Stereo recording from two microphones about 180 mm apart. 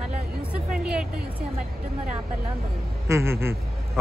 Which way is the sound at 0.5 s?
5° right (ahead or behind).